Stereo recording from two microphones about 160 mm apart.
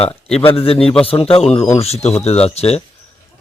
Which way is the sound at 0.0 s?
40° left (ahead or behind).